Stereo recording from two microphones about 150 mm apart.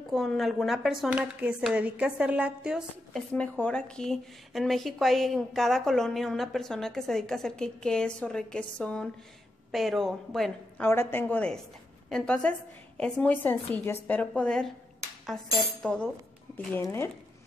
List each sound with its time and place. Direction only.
0.1 s a woman's voice: centre (ahead or behind)
3.3 s a woman's voice: 5° left (ahead or behind)
10.8 s a woman's voice: 15° left (ahead or behind)
15.8 s a woman's voice: 5° left (ahead or behind)
16.5 s a woman's voice: 15° left (ahead or behind)